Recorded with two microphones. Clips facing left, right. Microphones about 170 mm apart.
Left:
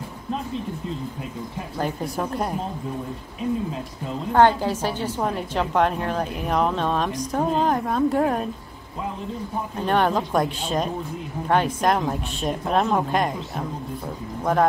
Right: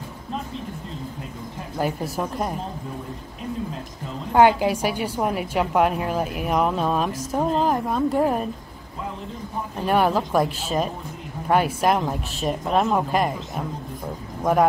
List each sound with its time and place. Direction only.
1.8 s a woman's voice: 5° right (ahead or behind)
4.3 s a woman's voice: 10° right (ahead or behind)
9.8 s a woman's voice: 5° right (ahead or behind)